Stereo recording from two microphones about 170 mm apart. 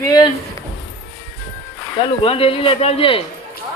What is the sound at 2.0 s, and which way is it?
Speech, 35° left (ahead or behind).